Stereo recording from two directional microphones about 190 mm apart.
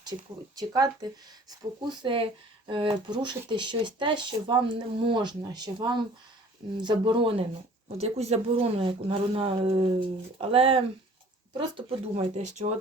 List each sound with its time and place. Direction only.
0.5 s speech: 20° right (ahead or behind); by 12.7 s 40° right (ahead or behind)